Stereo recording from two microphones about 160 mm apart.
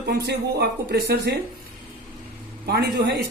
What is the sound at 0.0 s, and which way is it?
Speech, 90° right.